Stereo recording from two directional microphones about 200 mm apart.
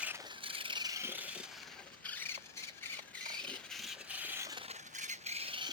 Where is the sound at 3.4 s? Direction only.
Centre (ahead or behind).